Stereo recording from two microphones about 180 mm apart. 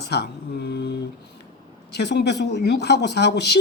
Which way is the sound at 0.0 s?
65° left (ahead or behind).